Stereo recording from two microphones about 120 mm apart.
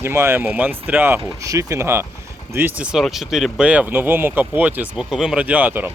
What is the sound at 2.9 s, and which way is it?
Speech, centre (ahead or behind).